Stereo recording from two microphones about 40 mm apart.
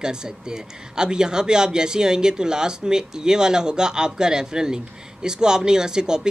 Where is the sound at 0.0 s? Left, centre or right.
Centre.